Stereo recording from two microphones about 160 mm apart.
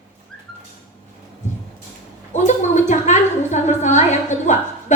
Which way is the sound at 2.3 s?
50° left (ahead or behind).